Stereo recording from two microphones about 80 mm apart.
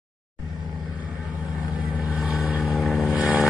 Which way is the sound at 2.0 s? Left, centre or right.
Centre.